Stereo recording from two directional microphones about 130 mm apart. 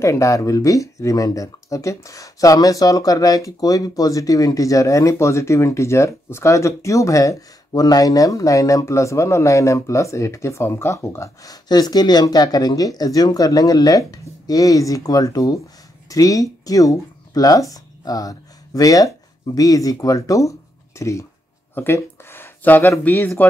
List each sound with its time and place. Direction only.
0.0 s speech: 25° left (ahead or behind)